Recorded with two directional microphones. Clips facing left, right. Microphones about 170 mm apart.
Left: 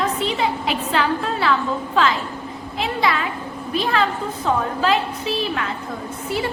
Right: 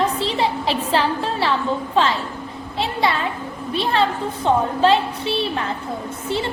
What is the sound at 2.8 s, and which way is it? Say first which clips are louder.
Speech: even; 30° right (ahead or behind).